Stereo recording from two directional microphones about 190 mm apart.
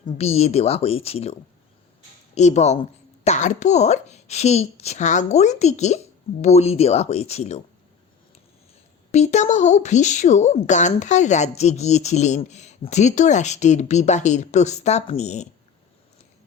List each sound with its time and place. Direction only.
0.2 s a woman's voice: 35° left (ahead or behind)
9.1 s a woman's voice: 40° left (ahead or behind)